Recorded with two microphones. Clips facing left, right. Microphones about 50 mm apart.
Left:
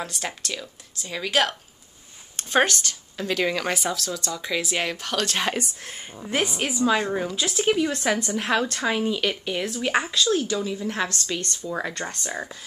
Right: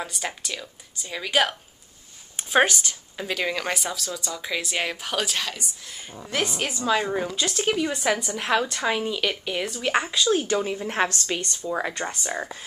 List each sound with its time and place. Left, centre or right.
0.0 s a woman's voice: centre
3.3 s a woman's voice: centre
5.5 s speech: left
6.4 s a woman's voice: centre
10.1 s speech: centre
10.4 s a woman's voice: right
11.3 s speech: right